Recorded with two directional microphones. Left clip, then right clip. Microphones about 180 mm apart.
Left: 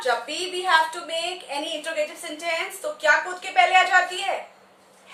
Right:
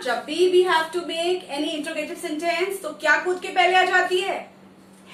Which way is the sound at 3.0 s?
20° left (ahead or behind).